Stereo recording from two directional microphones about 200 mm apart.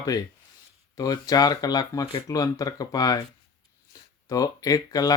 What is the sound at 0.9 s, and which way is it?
Speech, 20° left (ahead or behind).